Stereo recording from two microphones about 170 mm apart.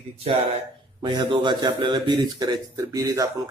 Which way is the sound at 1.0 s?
25° right (ahead or behind).